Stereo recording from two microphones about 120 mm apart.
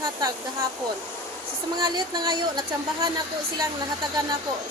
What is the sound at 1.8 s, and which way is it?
Speech, 35° right (ahead or behind).